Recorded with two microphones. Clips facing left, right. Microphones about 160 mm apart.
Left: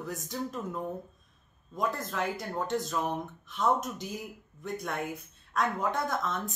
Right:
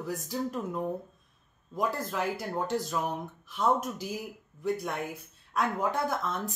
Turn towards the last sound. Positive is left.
turn(degrees=-5)  # may be behind; listen again after turning